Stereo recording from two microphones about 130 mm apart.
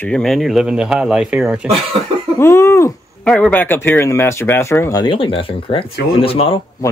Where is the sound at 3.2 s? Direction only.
10° left (ahead or behind).